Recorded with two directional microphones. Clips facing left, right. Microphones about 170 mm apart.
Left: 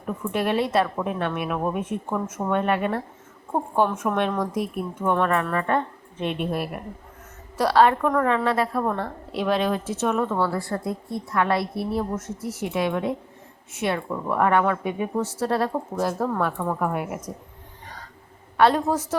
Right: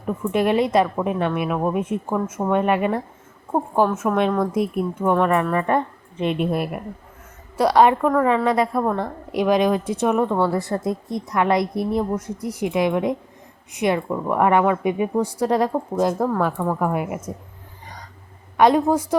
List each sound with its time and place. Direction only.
0.2 s a woman's voice: 10° right (ahead or behind)
17.8 s hiccup: 15° right (ahead or behind)
18.5 s a woman's voice: 10° right (ahead or behind)